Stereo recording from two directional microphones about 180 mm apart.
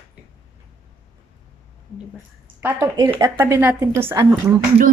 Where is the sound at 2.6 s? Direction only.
15° right (ahead or behind).